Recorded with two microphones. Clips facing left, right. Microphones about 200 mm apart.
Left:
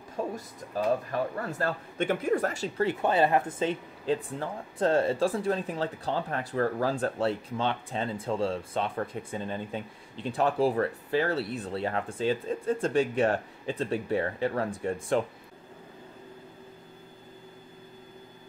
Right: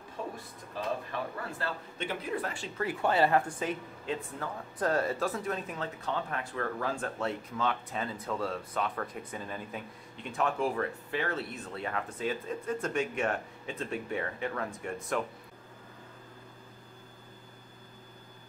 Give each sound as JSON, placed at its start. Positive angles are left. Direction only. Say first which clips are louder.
{"t": 0.7, "sound": "speech", "louder": "left 7 dB", "side_deg": 40}
{"t": 2.8, "sound": "speech", "louder": "left 3 dB", "side_deg": 25}